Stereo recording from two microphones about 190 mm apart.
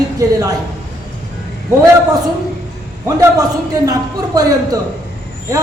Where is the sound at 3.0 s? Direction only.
15° right (ahead or behind).